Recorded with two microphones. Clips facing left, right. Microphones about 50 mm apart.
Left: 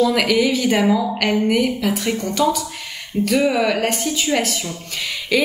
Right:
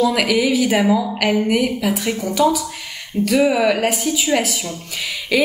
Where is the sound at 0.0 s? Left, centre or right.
Centre.